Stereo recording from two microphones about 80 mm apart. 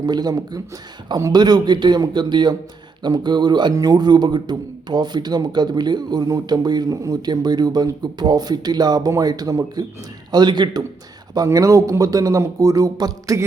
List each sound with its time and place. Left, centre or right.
0.0 s a man's voice: right
7.2 s a man's voice: right
10.3 s a man's voice: right
11.4 s a man's voice: right